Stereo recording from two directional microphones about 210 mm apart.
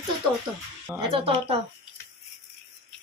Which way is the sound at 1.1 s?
25° right (ahead or behind).